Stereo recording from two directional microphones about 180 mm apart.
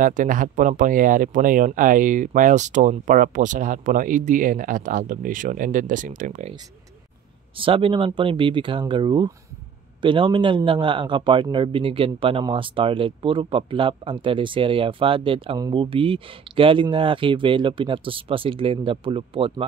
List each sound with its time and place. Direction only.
0.0 s speech: 45° right (ahead or behind)
7.5 s speech: 30° right (ahead or behind)